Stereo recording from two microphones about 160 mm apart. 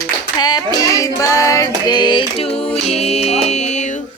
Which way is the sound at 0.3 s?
25° left (ahead or behind).